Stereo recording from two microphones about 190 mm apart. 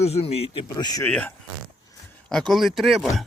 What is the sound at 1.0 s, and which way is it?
Speech, 10° left (ahead or behind).